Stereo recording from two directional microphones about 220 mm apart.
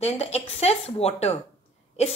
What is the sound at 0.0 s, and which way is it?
Speech, 30° left (ahead or behind).